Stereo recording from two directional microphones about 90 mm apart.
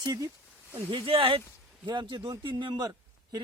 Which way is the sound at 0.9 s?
75° right (ahead or behind).